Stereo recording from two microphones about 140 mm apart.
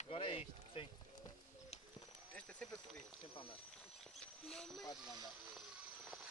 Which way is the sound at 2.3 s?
5° left (ahead or behind).